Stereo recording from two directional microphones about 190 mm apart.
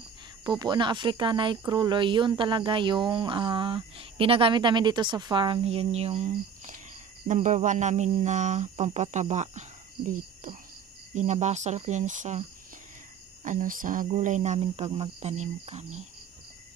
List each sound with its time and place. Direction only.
0.4 s speech: 20° right (ahead or behind); by 6.7 s 35° right (ahead or behind)
7.2 s cricket: 40° right (ahead or behind)